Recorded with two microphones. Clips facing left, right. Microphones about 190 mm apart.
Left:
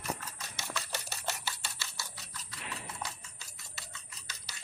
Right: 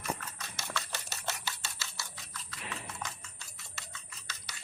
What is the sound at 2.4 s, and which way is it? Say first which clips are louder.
Horse: right 1 dB; 35° left (ahead or behind).